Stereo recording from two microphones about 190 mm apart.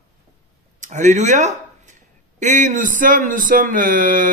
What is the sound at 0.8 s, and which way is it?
Speech, 40° right (ahead or behind).